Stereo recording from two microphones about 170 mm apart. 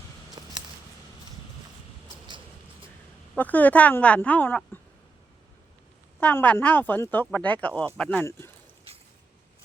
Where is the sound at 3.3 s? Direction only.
10° left (ahead or behind).